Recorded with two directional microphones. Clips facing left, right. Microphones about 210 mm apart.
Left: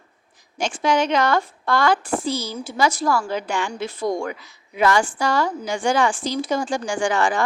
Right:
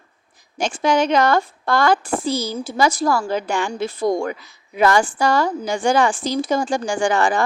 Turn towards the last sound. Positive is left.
turn(degrees=-40)  # may be behind; listen again after turning